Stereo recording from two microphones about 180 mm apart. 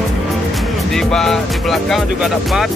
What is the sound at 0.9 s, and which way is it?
Speech, 5° left (ahead or behind).